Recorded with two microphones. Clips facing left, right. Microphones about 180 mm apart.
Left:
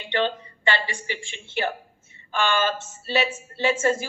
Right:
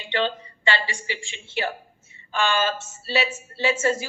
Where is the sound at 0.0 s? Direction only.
50° left (ahead or behind).